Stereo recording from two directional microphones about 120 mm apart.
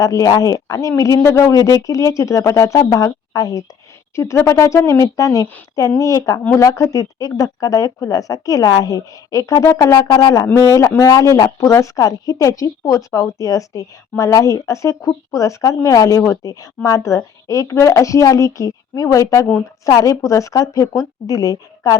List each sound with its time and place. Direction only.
0.0 s a woman's voice: 30° left (ahead or behind)